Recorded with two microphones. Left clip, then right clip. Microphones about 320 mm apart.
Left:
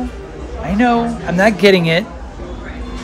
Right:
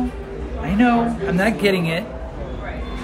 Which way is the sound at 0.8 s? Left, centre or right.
Centre.